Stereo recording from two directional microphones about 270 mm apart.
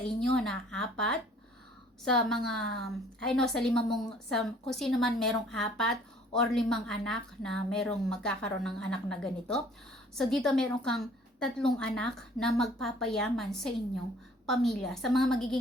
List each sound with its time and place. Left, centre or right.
0.1 s a woman's voice: centre